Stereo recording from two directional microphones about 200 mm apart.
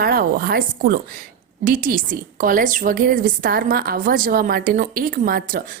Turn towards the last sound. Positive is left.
turn(degrees=-45)  # may be behind; listen again after turning